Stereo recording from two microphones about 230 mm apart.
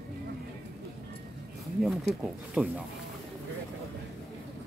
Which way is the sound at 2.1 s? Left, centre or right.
Centre.